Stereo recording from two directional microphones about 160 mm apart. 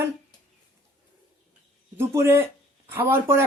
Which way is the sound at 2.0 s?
15° right (ahead or behind).